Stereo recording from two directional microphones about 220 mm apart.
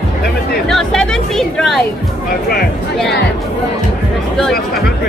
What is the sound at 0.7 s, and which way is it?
Chatter, centre (ahead or behind).